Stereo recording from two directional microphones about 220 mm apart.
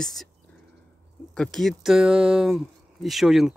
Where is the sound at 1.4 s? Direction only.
Centre (ahead or behind).